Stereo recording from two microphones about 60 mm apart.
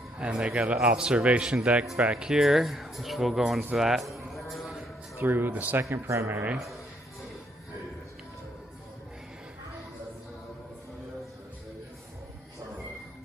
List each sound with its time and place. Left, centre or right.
0.2 s a man's voice: centre
3.7 s music: centre
5.1 s speech: right
5.9 s speech: right